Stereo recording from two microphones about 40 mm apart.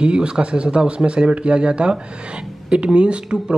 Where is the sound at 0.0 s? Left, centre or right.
Right.